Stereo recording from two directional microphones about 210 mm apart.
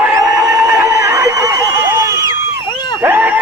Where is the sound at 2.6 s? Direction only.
20° left (ahead or behind).